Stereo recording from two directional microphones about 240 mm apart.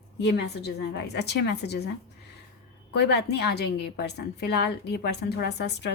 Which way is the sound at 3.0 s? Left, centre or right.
Left.